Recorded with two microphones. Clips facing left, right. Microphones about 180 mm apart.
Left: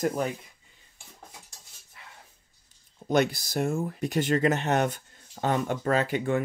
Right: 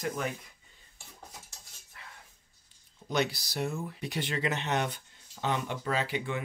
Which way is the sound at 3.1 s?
50° left (ahead or behind).